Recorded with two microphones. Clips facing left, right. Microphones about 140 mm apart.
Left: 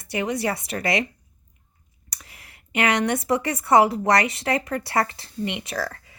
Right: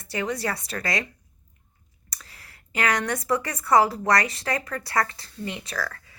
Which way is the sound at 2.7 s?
20° left (ahead or behind).